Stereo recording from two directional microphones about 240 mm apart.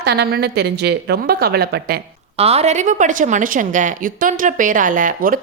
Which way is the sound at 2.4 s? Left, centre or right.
Right.